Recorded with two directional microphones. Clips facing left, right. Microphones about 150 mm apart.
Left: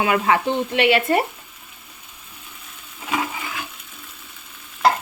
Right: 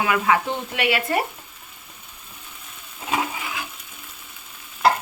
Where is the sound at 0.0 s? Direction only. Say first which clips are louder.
Left 2 dB; 30° left (ahead or behind).